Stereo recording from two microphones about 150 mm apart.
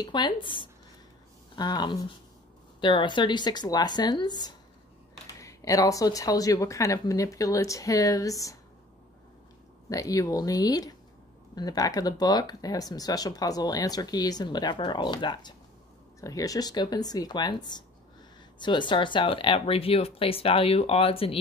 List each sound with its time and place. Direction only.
0.0 s speech: 30° left (ahead or behind)
9.8 s speech: 20° left (ahead or behind); by 21.4 s 40° left (ahead or behind)